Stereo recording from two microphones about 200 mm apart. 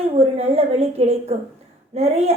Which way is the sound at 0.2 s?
30° right (ahead or behind).